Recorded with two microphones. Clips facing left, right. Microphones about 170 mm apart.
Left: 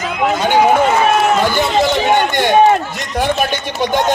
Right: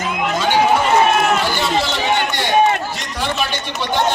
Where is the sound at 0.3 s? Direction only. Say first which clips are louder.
Left 3 dB; 55° left (ahead or behind).